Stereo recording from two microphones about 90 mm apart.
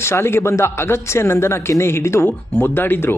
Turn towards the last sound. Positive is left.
turn(degrees=25)  # may be behind; listen again after turning